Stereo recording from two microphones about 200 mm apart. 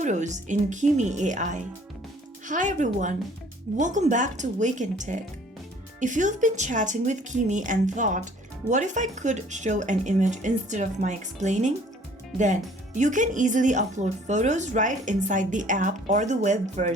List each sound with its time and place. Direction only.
0.0 s speech: 35° right (ahead or behind)